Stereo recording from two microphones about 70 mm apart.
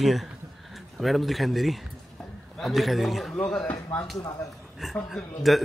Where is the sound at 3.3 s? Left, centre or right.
Centre.